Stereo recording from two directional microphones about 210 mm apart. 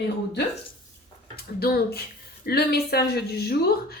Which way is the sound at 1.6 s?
50° left (ahead or behind).